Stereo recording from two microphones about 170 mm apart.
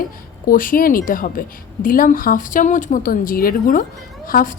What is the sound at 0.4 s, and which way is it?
A woman's voice, 55° left (ahead or behind).